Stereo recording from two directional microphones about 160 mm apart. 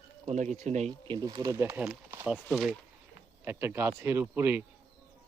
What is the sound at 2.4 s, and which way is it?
Speech, centre (ahead or behind).